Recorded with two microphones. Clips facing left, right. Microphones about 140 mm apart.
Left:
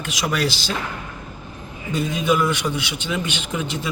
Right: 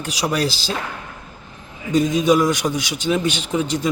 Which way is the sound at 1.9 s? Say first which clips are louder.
Right 5 dB; 40° right (ahead or behind).